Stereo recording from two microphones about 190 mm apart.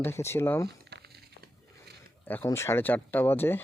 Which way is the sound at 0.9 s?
60° right (ahead or behind).